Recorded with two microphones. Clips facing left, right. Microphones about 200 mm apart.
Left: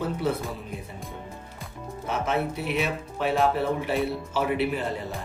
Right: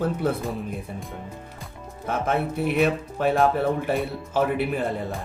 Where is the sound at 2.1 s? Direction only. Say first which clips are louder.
Right 2 dB; 55° right (ahead or behind).